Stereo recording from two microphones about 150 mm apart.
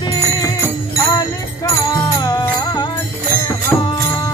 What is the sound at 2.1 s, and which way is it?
Music, 25° left (ahead or behind).